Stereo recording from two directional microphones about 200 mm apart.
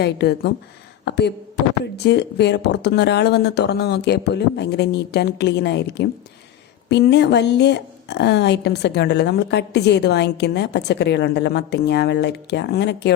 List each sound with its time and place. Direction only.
0.0 s speech: 55° left (ahead or behind)